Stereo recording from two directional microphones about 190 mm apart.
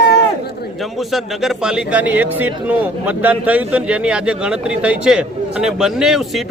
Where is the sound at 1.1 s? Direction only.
Centre (ahead or behind).